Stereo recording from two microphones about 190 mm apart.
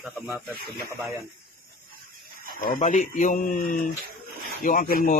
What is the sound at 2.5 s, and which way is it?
Speech, 50° left (ahead or behind).